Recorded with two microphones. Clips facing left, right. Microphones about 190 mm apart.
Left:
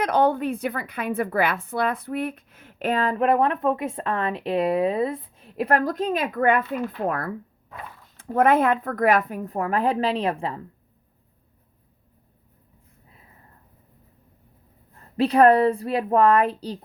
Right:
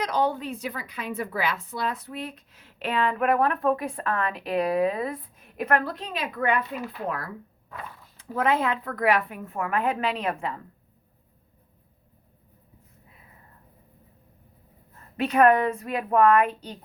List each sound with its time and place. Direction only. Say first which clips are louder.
0.0 s a woman's voice: left 5 dB; 55° left (ahead or behind)
8.2 s a woman's voice: left 6 dB; 50° left (ahead or behind); by 10.6 s 30° left (ahead or behind)
15.2 s a woman's voice: left 4 dB; 35° left (ahead or behind)